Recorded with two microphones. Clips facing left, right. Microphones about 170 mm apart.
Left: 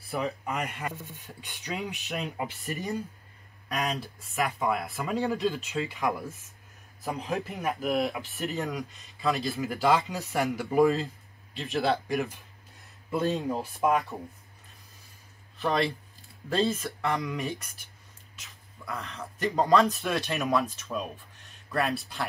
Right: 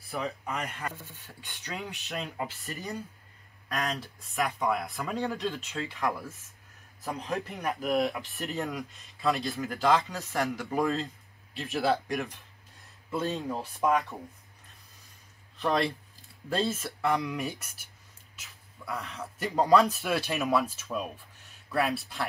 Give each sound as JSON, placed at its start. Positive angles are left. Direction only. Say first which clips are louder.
{"t": 0.2, "sound": "speech", "louder": "left 2 dB", "side_deg": 15}
{"t": 4.0, "sound": "speech", "louder": "left 1 dB", "side_deg": 0}
{"t": 7.1, "sound": "speech", "louder": "left 2 dB", "side_deg": 0}
{"t": 13.1, "sound": "speech", "louder": "left 3 dB", "side_deg": 15}
{"t": 15.5, "sound": "speech", "louder": "even", "side_deg": 0}